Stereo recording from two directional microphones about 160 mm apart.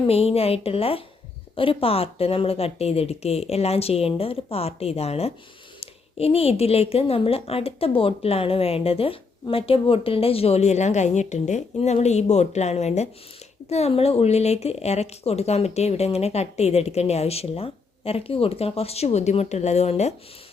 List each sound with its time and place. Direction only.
0.1 s a woman's voice: 40° left (ahead or behind)